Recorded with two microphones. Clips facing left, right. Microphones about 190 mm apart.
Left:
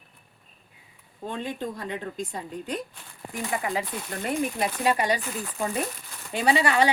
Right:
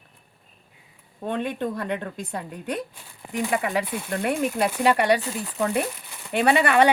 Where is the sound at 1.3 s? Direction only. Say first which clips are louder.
Right 5 dB; 60° right (ahead or behind).